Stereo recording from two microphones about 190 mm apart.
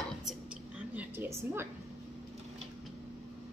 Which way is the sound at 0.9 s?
10° right (ahead or behind).